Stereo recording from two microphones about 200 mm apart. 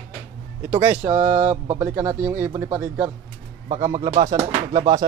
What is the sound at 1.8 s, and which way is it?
Speech, 10° right (ahead or behind).